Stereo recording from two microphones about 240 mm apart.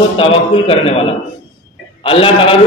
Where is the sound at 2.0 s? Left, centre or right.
Left.